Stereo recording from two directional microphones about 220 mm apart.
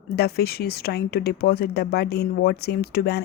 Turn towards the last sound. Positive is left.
turn(degrees=45)  # may be behind; listen again after turning